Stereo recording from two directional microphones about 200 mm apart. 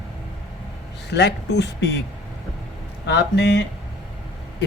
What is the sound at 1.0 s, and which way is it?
Speech, 60° left (ahead or behind).